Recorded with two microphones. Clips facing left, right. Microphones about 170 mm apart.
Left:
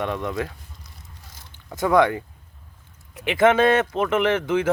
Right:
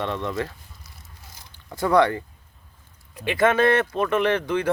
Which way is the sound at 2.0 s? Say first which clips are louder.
Even; 15° left (ahead or behind).